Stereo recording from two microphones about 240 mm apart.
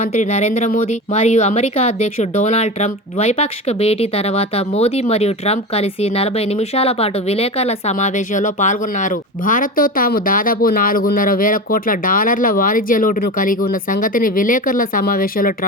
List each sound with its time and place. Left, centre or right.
0.0 s speech: left